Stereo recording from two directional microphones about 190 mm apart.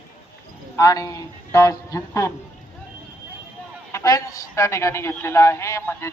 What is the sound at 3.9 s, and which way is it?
A woman's voice, 15° left (ahead or behind).